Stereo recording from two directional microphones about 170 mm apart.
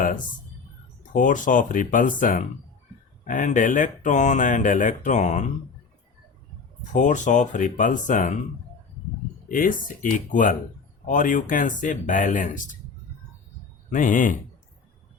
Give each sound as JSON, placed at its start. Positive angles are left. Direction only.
{"t": 1.1, "sound": "speech", "side_deg": 50}
{"t": 6.9, "sound": "speech", "side_deg": 45}
{"t": 9.5, "sound": "speech", "side_deg": 50}
{"t": 13.9, "sound": "speech", "side_deg": 50}